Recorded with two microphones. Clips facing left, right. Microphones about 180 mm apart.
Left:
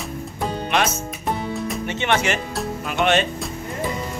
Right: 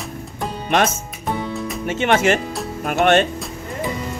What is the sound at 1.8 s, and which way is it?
Speech, 45° right (ahead or behind).